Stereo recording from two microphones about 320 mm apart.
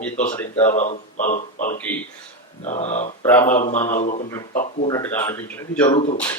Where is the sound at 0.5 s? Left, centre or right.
Left.